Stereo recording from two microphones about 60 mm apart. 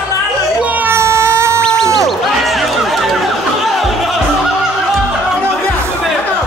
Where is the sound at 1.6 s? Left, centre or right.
Centre.